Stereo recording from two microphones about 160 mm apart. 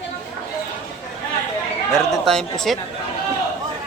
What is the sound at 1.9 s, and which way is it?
Speech, 5° left (ahead or behind).